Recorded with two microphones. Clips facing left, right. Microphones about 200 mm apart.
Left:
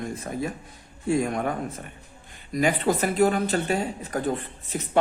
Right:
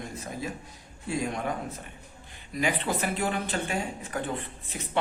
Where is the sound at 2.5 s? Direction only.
45° left (ahead or behind).